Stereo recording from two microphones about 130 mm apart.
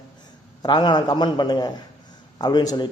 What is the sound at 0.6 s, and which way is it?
Speech, 35° left (ahead or behind).